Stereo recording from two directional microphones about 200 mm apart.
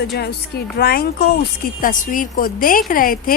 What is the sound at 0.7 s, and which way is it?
Speech, 50° left (ahead or behind).